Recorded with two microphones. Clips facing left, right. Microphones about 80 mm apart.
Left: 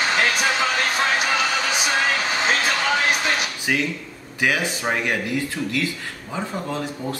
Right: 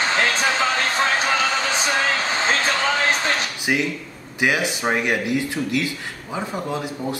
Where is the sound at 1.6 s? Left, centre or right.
Right.